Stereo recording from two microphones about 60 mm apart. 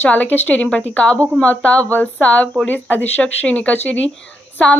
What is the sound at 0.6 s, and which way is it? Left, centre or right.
A woman's voice, centre.